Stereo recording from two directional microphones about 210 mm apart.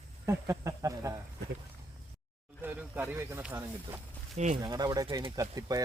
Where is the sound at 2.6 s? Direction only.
10° right (ahead or behind).